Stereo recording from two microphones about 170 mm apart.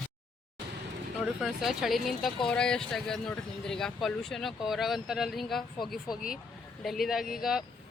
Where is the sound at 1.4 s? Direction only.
Centre (ahead or behind).